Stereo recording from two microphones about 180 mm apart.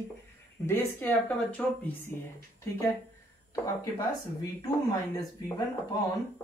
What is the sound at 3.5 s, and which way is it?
Speech, 20° left (ahead or behind).